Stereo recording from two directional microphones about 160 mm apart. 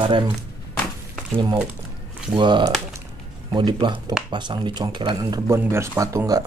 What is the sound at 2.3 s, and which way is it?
Speech, 30° right (ahead or behind).